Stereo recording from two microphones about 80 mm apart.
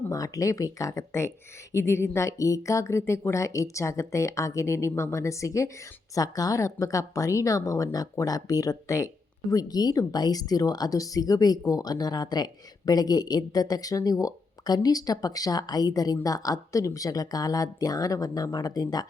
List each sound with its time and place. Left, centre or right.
0.1 s a woman's voice: left
9.5 s a woman's voice: left